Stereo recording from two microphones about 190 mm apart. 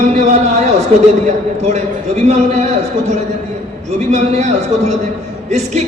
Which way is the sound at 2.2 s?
35° right (ahead or behind).